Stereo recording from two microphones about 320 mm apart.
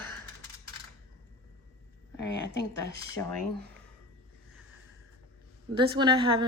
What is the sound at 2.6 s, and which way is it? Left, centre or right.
Speech, left.